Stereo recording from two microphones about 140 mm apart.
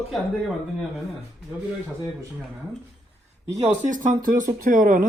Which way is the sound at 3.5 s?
55° right (ahead or behind).